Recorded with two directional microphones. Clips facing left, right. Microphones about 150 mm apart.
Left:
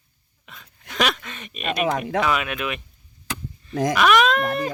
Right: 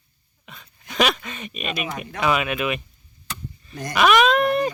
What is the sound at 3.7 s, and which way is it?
Speech, 90° left.